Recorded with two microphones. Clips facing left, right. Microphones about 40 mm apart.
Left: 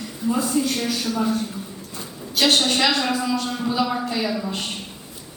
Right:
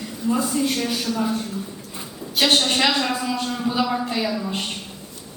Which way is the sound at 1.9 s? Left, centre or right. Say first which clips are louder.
Even; centre.